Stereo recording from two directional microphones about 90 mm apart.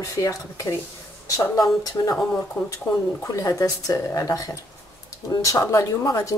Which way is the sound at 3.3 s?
40° left (ahead or behind).